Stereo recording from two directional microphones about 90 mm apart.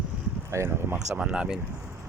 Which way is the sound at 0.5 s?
30° right (ahead or behind).